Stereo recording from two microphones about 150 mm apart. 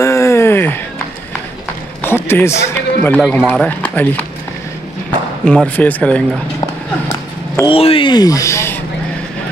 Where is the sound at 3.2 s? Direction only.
Centre (ahead or behind).